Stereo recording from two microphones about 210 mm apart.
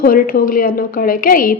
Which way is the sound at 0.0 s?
40° left (ahead or behind).